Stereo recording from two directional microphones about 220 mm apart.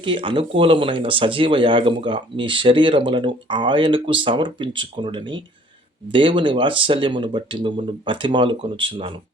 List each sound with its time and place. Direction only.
0.0 s speech: 25° right (ahead or behind)